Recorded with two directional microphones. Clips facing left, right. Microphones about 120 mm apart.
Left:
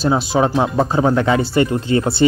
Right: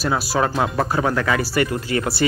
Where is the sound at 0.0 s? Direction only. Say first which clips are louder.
Left 5 dB; 25° left (ahead or behind).